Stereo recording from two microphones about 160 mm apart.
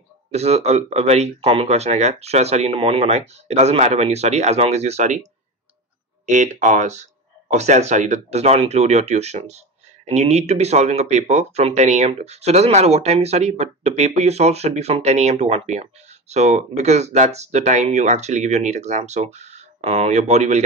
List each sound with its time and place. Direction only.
0.3 s speech: 40° right (ahead or behind)
6.2 s speech: 50° right (ahead or behind)